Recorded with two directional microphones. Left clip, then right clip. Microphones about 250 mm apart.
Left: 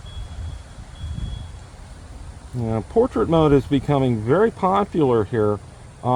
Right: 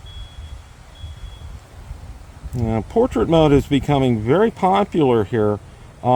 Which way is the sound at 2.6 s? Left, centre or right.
Right.